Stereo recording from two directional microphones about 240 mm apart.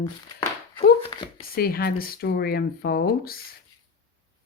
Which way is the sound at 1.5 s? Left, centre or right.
Left.